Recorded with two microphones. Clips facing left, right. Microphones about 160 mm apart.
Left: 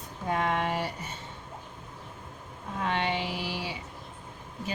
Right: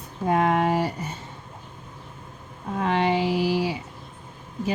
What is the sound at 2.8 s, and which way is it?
Speech, 35° right (ahead or behind).